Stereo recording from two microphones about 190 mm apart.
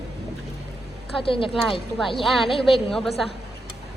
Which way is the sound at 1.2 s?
30° left (ahead or behind).